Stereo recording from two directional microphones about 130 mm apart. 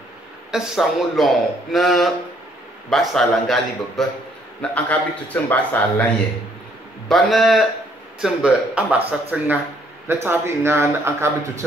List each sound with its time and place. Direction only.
0.5 s a man's voice: 5° right (ahead or behind)
7.1 s a man's voice: centre (ahead or behind); by 11.5 s 20° right (ahead or behind)